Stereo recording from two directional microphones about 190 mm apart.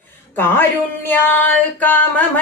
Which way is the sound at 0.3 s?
10° left (ahead or behind).